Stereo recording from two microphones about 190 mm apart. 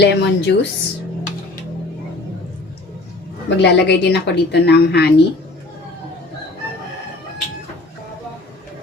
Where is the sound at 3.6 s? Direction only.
65° left (ahead or behind).